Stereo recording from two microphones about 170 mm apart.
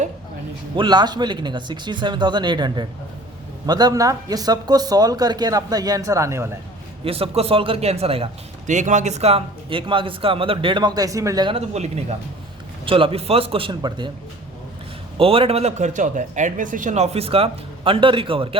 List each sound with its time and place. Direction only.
0.8 s speech: 25° right (ahead or behind)
7.0 s a man's voice: 35° right (ahead or behind)
12.8 s a man's voice: 30° right (ahead or behind)
15.2 s a man's voice: 35° right (ahead or behind)